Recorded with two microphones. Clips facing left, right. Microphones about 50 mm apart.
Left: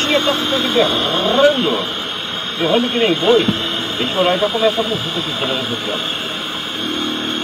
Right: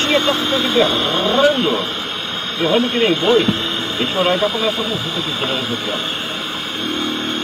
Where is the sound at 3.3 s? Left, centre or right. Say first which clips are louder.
Left 2 dB; left.